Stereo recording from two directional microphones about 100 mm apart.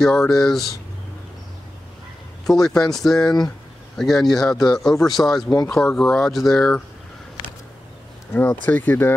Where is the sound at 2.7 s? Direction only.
5° left (ahead or behind).